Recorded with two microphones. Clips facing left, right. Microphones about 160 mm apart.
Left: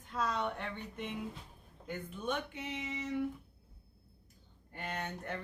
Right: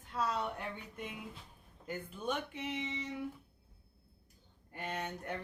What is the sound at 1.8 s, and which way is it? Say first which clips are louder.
Speech: even; 5° right (ahead or behind).